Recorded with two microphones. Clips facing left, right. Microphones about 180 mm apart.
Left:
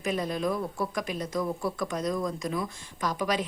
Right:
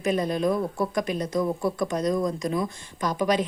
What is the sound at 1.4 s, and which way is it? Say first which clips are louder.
Speech: right 5 dB; 20° right (ahead or behind).